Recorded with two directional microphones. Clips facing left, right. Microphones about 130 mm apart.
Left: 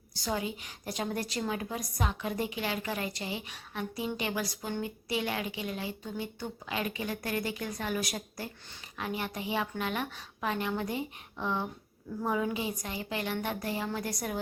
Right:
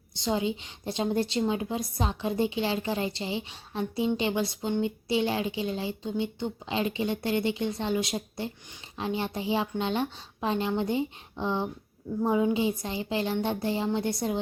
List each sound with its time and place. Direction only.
0.1 s a woman's voice: 25° right (ahead or behind)